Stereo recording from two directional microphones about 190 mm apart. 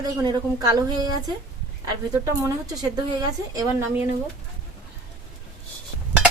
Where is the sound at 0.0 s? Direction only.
20° right (ahead or behind).